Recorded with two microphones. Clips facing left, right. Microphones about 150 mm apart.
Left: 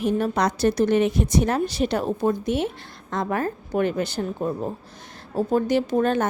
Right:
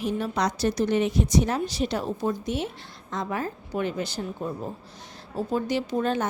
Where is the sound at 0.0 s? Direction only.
55° left (ahead or behind).